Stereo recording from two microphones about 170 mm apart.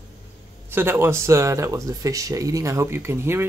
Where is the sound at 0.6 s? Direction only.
15° right (ahead or behind).